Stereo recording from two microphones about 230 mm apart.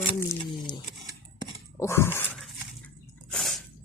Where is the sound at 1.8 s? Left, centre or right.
Centre.